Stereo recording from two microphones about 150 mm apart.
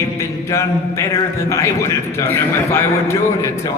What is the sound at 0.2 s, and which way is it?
A man's voice, 20° left (ahead or behind).